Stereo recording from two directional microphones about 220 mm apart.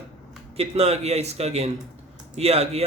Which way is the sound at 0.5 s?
30° right (ahead or behind).